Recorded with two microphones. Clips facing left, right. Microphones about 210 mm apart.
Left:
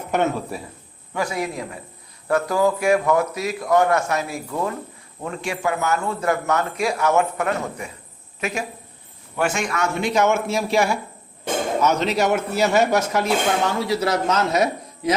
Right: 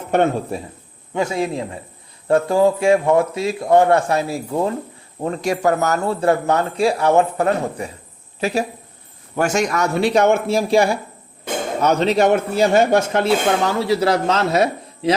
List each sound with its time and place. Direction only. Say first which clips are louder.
0.1 s speech: right 5 dB; 30° right (ahead or behind)